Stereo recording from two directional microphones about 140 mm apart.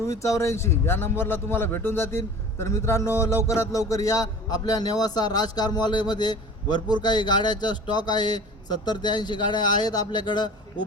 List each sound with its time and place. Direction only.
0.0 s a man's voice: 20° left (ahead or behind)